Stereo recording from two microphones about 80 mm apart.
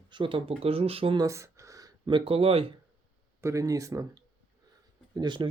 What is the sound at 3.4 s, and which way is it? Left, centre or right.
Speech, right.